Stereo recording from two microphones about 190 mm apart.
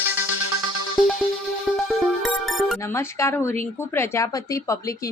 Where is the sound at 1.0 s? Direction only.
Centre (ahead or behind).